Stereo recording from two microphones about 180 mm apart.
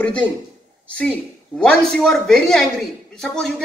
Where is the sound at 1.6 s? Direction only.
5° left (ahead or behind).